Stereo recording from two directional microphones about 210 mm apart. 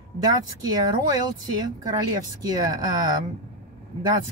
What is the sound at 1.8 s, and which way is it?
Speech, 15° right (ahead or behind).